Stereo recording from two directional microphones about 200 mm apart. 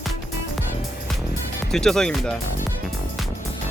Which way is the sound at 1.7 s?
Centre (ahead or behind).